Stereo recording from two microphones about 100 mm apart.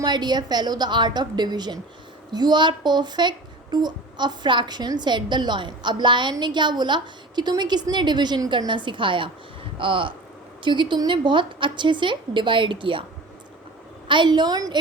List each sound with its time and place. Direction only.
0.0 s speech: 45° right (ahead or behind)
14.1 s speech: 50° right (ahead or behind)